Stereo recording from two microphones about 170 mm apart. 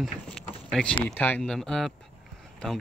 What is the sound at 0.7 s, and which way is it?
Speech, 5° left (ahead or behind).